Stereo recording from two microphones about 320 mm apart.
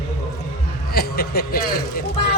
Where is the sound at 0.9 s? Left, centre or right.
Left.